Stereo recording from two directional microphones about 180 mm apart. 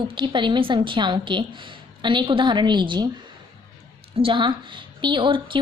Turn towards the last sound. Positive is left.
turn(degrees=-30)  # may be behind; listen again after turning